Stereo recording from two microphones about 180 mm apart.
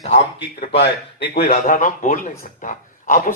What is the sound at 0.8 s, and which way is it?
Speech, 65° left (ahead or behind).